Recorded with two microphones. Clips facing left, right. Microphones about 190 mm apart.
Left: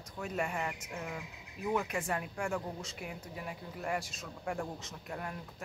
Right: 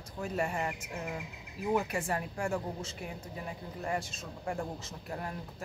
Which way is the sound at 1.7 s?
30° right (ahead or behind).